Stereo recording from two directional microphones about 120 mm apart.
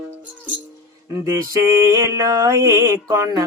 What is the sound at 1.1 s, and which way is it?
Mantra, 25° right (ahead or behind).